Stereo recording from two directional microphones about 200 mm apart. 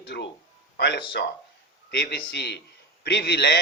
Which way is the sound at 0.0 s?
60° left (ahead or behind).